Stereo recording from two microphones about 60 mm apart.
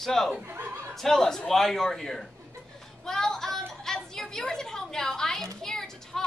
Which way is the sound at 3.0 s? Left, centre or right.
Centre.